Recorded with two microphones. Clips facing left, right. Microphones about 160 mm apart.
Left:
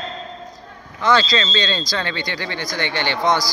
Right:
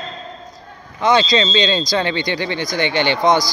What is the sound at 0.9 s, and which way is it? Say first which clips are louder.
Speech: right 3 dB; 20° right (ahead or behind).